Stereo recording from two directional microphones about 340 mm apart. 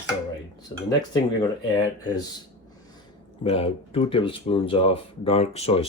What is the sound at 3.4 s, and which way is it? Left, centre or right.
Speech, centre.